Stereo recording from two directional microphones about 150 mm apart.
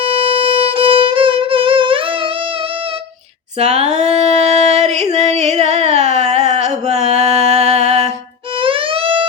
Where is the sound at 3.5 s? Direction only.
45° right (ahead or behind).